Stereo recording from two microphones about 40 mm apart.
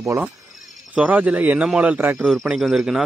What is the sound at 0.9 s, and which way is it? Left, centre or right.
Speech, right.